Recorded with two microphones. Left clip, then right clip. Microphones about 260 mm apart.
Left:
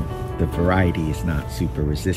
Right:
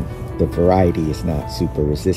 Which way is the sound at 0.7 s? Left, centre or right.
Centre.